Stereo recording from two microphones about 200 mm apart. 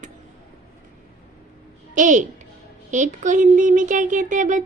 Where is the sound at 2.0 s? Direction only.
40° right (ahead or behind).